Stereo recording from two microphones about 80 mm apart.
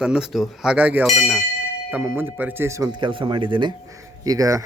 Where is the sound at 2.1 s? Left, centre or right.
Right.